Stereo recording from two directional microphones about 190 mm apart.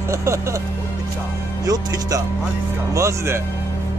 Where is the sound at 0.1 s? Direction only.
15° right (ahead or behind).